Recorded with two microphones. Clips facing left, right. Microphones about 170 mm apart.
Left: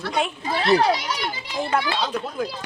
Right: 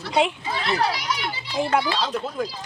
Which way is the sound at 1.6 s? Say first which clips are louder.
Right 2 dB; 10° right (ahead or behind).